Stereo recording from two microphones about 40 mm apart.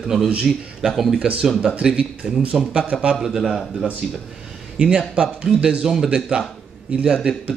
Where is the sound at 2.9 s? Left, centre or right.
Right.